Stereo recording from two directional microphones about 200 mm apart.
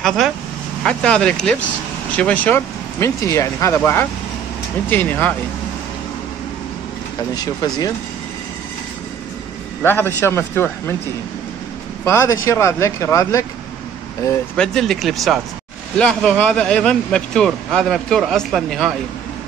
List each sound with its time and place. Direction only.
0.8 s speech: 5° left (ahead or behind)
7.3 s speech: 20° left (ahead or behind)
9.8 s speech: 10° left (ahead or behind)
12.0 s speech: 15° left (ahead or behind)
14.6 s speech: centre (ahead or behind)